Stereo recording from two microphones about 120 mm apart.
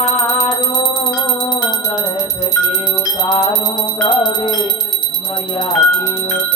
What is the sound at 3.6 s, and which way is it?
Music, 35° left (ahead or behind).